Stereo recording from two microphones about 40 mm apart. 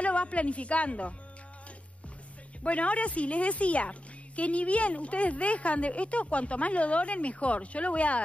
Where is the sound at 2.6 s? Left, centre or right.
Left.